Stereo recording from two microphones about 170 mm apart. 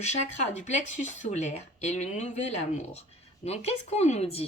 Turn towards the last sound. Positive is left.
turn(degrees=35)  # may be behind; listen again after turning